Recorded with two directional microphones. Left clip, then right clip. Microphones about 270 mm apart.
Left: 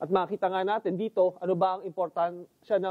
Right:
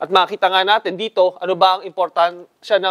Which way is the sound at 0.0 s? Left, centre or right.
Centre.